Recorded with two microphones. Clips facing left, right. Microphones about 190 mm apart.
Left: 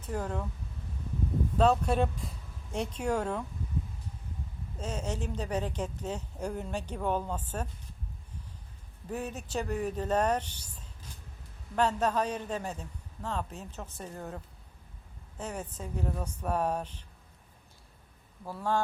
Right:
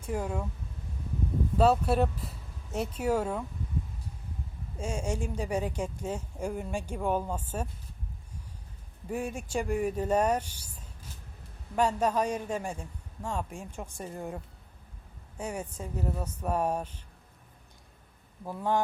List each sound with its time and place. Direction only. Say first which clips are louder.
0.0 s speech: right 2 dB; 10° right (ahead or behind)
1.5 s speech: right 2 dB; 5° right (ahead or behind)
4.8 s speech: right 2 dB; 10° right (ahead or behind)
9.0 s speech: right 3 dB; 10° right (ahead or behind)
18.4 s speech: right 2 dB; 15° right (ahead or behind)